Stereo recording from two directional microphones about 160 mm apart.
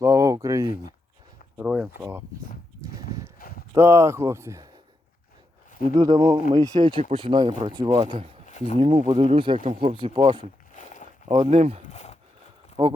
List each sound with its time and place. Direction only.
0.0 s a sound: 20° right (ahead or behind)
1.5 s speech: 5° right (ahead or behind)
3.3 s clip-clop: 65° left (ahead or behind)
3.8 s speech: 15° right (ahead or behind)
5.9 s speech: 25° right (ahead or behind)
8.4 s a sound: 45° left (ahead or behind)
8.8 s speech: 30° right (ahead or behind)
10.8 s a sound: 50° left (ahead or behind)
11.3 s speech: 35° right (ahead or behind)
11.8 s speech: 45° left (ahead or behind)
12.8 s speech: 30° right (ahead or behind)